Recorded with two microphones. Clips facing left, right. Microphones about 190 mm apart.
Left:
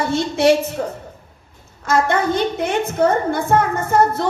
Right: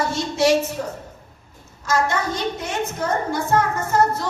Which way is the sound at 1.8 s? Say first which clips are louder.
Left 4 dB; 55° left (ahead or behind).